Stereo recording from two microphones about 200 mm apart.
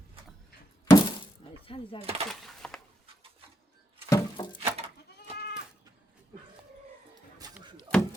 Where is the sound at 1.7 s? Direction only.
25° left (ahead or behind).